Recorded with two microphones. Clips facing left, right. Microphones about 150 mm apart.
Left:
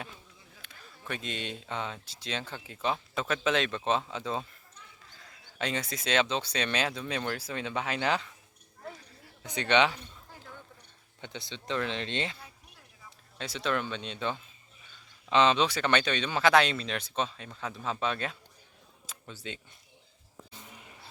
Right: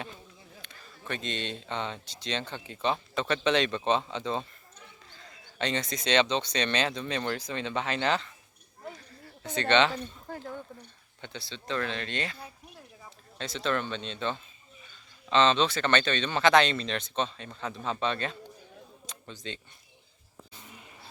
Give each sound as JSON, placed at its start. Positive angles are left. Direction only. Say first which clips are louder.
{"t": 0.6, "sound": "speech", "louder": "left 1 dB", "side_deg": 5}
{"t": 9.4, "sound": "speech", "louder": "right 1 dB", "side_deg": 10}
{"t": 10.2, "sound": "a sound", "louder": "right 12 dB", "side_deg": -55}
{"t": 11.2, "sound": "speech", "louder": "even", "side_deg": 15}
{"t": 13.4, "sound": "speech", "louder": "right 1 dB", "side_deg": 10}
{"t": 19.0, "sound": "a sound", "louder": "right 1 dB", "side_deg": 5}